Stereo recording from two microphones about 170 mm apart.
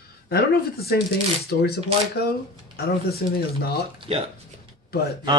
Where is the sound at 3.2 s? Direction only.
65° left (ahead or behind).